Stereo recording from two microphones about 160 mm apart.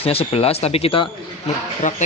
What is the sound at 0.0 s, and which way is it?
Speech, 35° left (ahead or behind).